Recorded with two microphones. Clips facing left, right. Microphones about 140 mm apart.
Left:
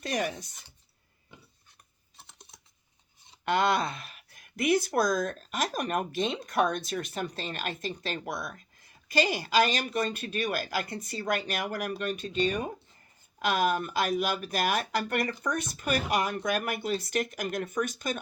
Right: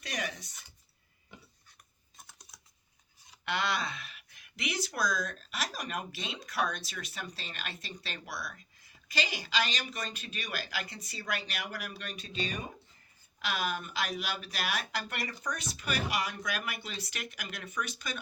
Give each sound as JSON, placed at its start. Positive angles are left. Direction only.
{"t": 0.0, "sound": "speech", "side_deg": 50}
{"t": 2.1, "sound": "typing", "side_deg": 25}
{"t": 3.4, "sound": "speech", "side_deg": 50}